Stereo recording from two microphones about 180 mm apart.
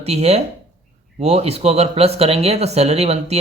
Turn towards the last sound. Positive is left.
turn(degrees=-35)  # may be behind; listen again after turning